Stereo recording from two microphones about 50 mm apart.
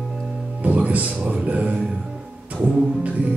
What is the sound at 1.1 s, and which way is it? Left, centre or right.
Music, right.